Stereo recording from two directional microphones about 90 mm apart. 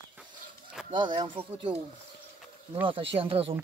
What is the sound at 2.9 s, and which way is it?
Speech, 80° right.